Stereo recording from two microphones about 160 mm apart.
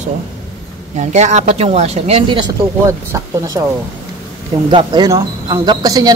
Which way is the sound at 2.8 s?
20° right (ahead or behind).